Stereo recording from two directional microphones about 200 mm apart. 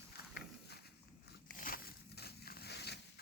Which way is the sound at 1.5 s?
45° left (ahead or behind).